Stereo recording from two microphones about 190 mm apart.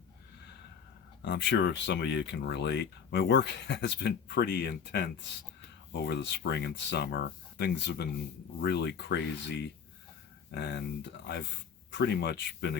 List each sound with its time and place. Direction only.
1.2 s speech: 65° left (ahead or behind)